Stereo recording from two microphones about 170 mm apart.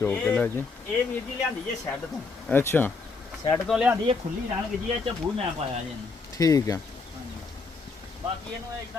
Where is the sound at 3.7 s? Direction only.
5° right (ahead or behind).